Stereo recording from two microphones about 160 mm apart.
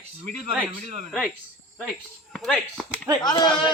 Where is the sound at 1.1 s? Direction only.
Centre (ahead or behind).